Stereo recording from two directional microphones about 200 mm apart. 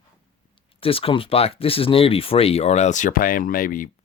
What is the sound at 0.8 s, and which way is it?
Speech, 30° left (ahead or behind).